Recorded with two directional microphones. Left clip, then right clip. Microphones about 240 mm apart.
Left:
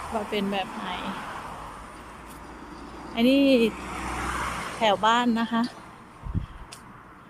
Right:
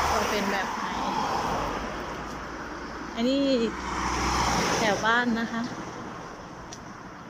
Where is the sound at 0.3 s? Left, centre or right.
Centre.